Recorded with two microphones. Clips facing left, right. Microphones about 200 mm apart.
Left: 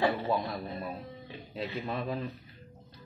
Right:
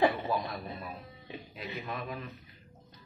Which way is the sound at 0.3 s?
30° left (ahead or behind).